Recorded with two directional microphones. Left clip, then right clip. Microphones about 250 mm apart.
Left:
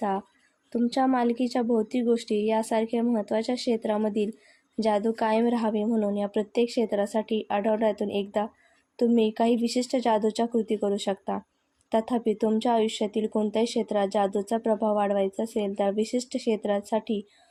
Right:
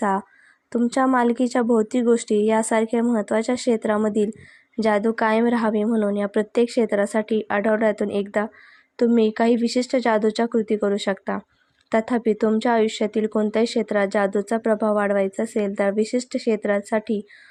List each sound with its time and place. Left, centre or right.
0.7 s speech: centre